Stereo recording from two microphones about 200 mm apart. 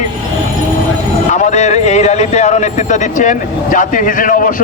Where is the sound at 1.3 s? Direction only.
35° left (ahead or behind).